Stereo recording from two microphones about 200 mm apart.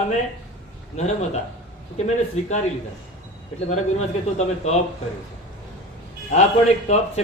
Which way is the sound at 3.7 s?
35° left (ahead or behind).